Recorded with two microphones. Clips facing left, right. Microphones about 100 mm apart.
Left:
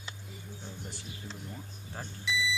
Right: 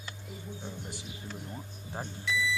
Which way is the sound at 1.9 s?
20° right (ahead or behind).